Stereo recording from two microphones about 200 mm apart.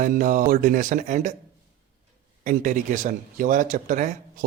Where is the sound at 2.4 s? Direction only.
40° right (ahead or behind).